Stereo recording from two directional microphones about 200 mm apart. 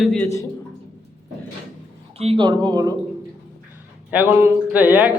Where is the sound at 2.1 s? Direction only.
30° right (ahead or behind).